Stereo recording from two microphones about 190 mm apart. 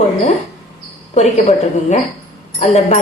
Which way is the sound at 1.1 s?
35° left (ahead or behind).